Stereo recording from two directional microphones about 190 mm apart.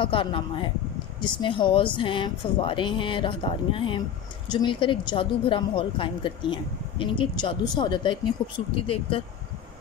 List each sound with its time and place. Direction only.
0.0 s speech: 25° left (ahead or behind)